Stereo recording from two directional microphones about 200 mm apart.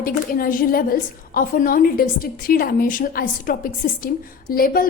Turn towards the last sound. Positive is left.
turn(degrees=45)  # may be behind; listen again after turning